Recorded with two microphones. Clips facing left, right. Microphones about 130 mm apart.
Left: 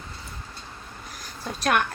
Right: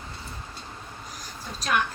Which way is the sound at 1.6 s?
60° left (ahead or behind).